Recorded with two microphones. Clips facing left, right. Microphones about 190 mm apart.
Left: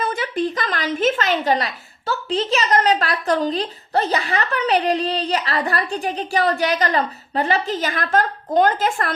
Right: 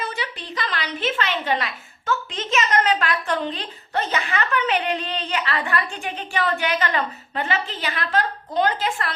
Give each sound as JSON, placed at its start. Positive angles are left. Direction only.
{"t": 0.0, "sound": "a woman's voice", "side_deg": 50}